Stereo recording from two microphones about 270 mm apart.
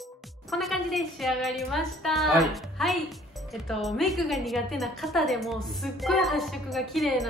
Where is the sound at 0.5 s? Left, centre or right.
Centre.